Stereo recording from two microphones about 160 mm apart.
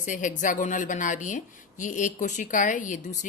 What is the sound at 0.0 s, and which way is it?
A woman's voice, 50° left (ahead or behind).